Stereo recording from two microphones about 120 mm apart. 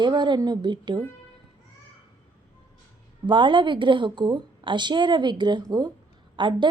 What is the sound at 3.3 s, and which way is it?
A woman's voice, 45° right (ahead or behind).